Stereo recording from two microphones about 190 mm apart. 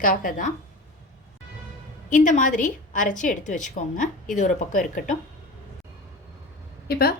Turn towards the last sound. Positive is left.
turn(degrees=55)  # may be behind; listen again after turning